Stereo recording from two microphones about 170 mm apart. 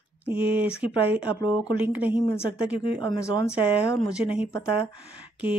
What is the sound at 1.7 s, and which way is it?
Speech, 10° right (ahead or behind).